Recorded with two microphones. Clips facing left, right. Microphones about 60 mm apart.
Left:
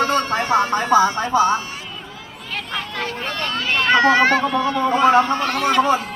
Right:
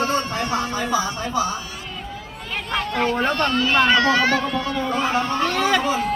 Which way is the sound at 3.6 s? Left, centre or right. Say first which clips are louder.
Left 3 dB; left.